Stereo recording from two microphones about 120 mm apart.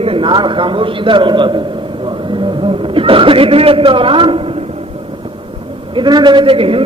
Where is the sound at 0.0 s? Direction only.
45° right (ahead or behind).